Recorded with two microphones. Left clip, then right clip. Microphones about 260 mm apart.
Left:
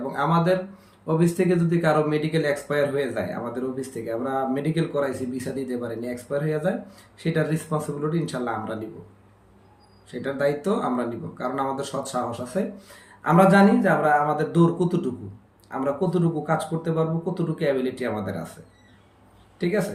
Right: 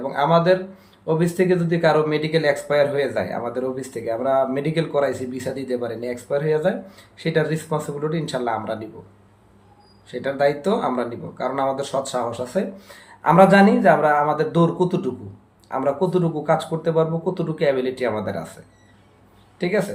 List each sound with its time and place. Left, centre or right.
0.1 s speech: centre
10.1 s speech: centre
19.5 s speech: centre